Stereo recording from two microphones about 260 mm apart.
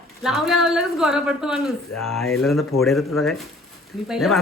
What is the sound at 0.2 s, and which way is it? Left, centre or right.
A man's voice, centre.